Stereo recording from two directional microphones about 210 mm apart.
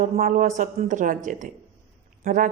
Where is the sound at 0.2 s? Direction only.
40° right (ahead or behind).